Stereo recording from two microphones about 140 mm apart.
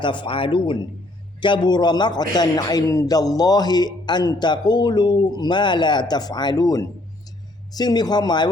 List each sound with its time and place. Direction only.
0.0 s a man's voice: 35° left (ahead or behind)